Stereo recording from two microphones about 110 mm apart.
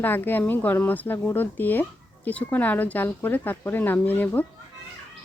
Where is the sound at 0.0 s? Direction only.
20° left (ahead or behind).